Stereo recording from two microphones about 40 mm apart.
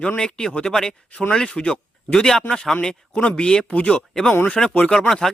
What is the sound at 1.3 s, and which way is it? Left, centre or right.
Speech, left.